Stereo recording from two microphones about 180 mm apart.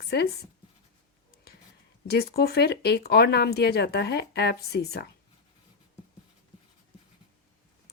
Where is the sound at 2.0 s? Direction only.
60° left (ahead or behind).